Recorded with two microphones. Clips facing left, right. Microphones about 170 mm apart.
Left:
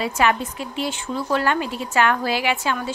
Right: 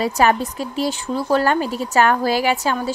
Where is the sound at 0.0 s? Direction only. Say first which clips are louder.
Right 3 dB; 40° right (ahead or behind).